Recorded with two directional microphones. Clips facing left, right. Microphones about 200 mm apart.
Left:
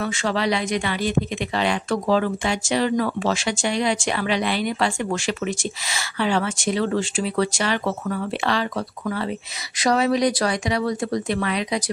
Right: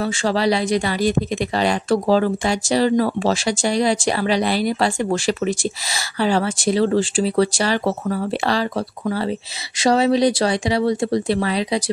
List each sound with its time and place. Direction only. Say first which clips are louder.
0.0 s speech: right 4 dB; 35° right (ahead or behind)